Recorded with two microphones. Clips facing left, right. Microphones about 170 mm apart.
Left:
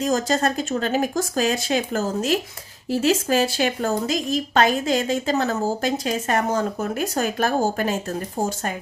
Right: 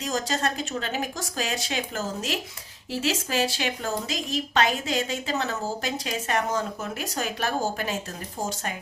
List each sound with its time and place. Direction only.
0.0 s a woman's voice: 45° left (ahead or behind)